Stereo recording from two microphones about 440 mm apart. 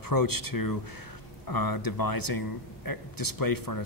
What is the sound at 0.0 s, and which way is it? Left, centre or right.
Speech, left.